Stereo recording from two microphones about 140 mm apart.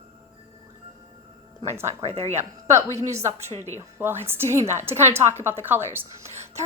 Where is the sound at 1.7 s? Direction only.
20° right (ahead or behind).